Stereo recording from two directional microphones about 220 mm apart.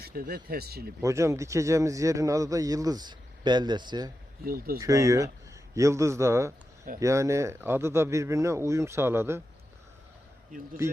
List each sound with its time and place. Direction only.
0.0 s speech: 40° right (ahead or behind)
1.0 s a man's voice: 15° right (ahead or behind)
4.4 s speech: 40° right (ahead or behind)
4.8 s a man's voice: 15° right (ahead or behind)